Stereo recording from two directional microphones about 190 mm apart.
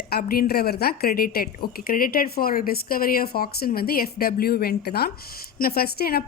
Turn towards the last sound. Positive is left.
turn(degrees=55)  # may be behind; listen again after turning